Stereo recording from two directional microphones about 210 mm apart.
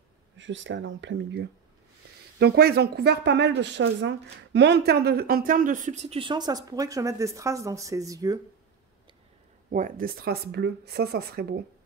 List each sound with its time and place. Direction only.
0.4 s speech: 60° right (ahead or behind); by 8.4 s 15° right (ahead or behind)
9.7 s speech: 40° right (ahead or behind)